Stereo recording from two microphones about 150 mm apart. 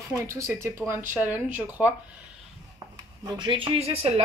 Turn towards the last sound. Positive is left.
turn(degrees=-40)  # may be behind; listen again after turning